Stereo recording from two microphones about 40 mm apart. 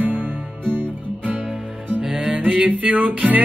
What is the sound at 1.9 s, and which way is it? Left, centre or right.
Music, right.